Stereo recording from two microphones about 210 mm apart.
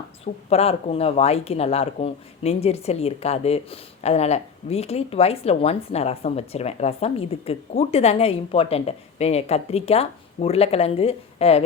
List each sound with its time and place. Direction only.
0.5 s speech: 30° left (ahead or behind)